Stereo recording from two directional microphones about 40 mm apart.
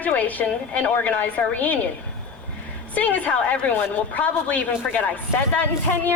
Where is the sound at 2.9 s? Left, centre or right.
Left.